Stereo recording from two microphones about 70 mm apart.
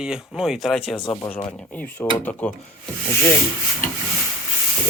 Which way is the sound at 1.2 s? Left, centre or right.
Left.